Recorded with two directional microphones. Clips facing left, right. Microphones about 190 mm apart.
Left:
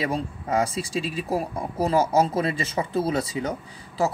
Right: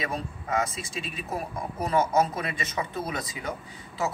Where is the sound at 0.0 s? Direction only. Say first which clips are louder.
Left 5 dB; 30° left (ahead or behind).